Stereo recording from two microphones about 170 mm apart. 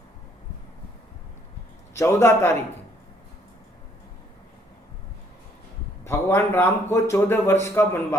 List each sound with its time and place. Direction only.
2.0 s a man's voice: 15° left (ahead or behind)
6.1 s a man's voice: 15° left (ahead or behind)